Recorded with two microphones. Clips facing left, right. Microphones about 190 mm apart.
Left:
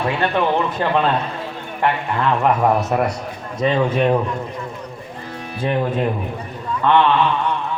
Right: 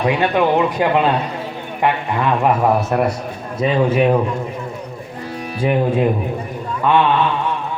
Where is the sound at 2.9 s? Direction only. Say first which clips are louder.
Right 2 dB; centre (ahead or behind).